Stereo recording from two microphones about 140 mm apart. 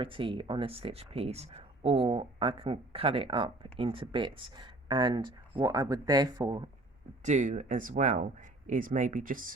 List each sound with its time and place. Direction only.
0.0 s speech: 40° right (ahead or behind)
7.3 s speech: 60° right (ahead or behind); by 9.6 s 75° right (ahead or behind)